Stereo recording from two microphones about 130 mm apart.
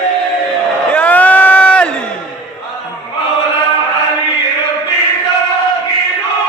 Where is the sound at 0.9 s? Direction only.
10° left (ahead or behind).